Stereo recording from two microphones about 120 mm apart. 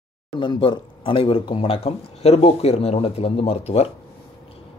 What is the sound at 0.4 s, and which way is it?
Speech, 40° left (ahead or behind).